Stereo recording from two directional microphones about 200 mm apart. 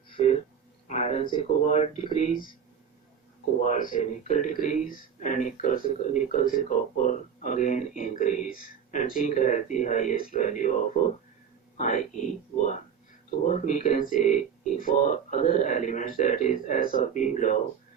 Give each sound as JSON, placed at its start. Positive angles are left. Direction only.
{"t": 0.9, "sound": "speech", "side_deg": 35}
{"t": 3.6, "sound": "speech", "side_deg": 40}